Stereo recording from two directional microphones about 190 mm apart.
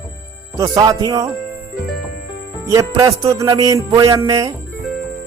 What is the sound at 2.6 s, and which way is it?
Music, 15° right (ahead or behind).